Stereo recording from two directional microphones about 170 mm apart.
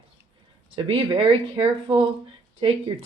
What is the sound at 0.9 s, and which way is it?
Speech, 30° right (ahead or behind).